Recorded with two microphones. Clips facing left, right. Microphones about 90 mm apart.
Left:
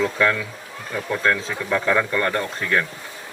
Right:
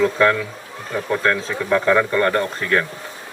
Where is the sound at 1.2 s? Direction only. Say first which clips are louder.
Left 1 dB; 45° right (ahead or behind).